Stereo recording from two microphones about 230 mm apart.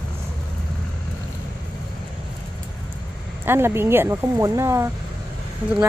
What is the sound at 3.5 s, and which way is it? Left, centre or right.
Speech, centre.